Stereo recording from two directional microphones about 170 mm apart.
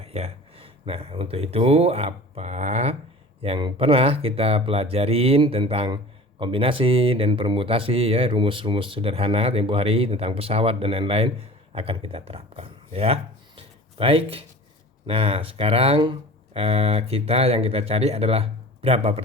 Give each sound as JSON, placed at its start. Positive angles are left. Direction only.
{"t": 0.0, "sound": "speech", "side_deg": -35}
{"t": 13.6, "sound": "a sound", "side_deg": -35}
{"t": 15.0, "sound": "speech", "side_deg": -35}